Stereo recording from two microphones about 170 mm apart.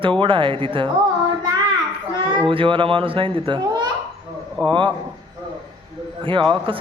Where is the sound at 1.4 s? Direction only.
25° right (ahead or behind).